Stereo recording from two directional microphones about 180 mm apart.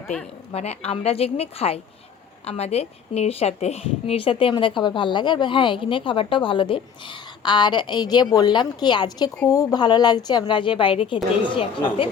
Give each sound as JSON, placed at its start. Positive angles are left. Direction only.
{"t": 0.5, "sound": "a woman's voice", "side_deg": 35}